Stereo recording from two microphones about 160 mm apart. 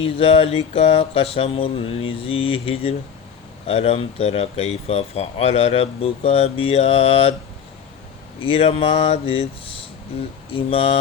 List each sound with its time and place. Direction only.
0.2 s speech: 35° left (ahead or behind)
8.4 s speech: 35° left (ahead or behind)
10.5 s speech: 35° left (ahead or behind)